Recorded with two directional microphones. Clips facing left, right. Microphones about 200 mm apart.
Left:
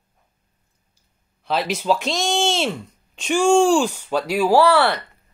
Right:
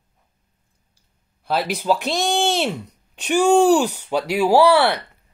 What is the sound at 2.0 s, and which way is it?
Speech, 60° right (ahead or behind).